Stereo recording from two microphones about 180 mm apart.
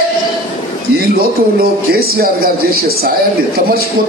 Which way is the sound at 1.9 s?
55° right (ahead or behind).